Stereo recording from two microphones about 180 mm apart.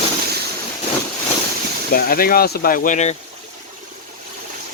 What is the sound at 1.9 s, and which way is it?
Speech, 55° left (ahead or behind).